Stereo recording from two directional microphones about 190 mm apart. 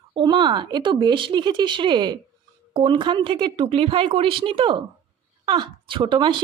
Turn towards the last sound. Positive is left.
turn(degrees=-25)  # may be behind; listen again after turning